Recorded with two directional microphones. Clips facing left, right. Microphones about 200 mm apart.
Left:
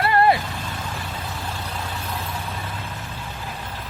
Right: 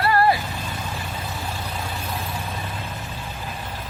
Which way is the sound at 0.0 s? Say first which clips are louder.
Left 1 dB; 25° left (ahead or behind).